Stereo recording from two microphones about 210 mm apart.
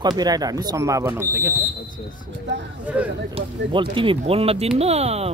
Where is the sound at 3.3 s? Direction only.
25° right (ahead or behind).